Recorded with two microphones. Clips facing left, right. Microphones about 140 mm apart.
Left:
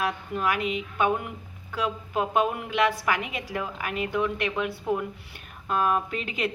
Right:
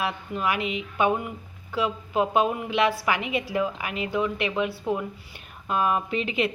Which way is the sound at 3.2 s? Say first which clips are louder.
Right 5 dB; 45° left (ahead or behind).